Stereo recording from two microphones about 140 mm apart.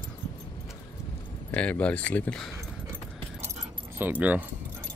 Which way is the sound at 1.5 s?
10° left (ahead or behind).